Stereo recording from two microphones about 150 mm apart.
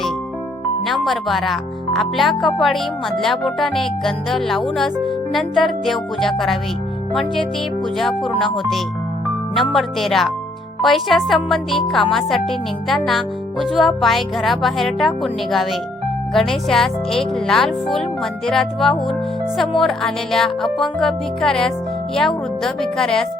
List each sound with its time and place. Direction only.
0.9 s speech: centre (ahead or behind)